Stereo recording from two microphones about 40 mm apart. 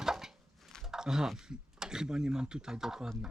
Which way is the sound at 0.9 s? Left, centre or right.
Centre.